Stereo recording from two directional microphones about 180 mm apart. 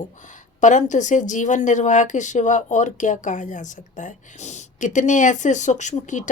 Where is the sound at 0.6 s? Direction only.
45° left (ahead or behind).